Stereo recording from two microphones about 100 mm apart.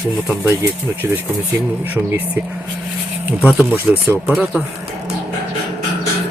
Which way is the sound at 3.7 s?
20° right (ahead or behind).